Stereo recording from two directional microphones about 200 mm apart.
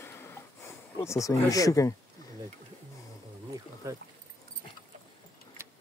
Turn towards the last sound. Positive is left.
turn(degrees=-10)  # may be behind; listen again after turning